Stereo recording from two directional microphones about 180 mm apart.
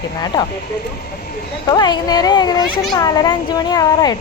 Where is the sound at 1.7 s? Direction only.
20° left (ahead or behind).